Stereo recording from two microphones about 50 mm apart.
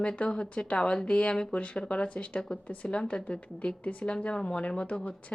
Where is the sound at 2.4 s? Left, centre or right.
Centre.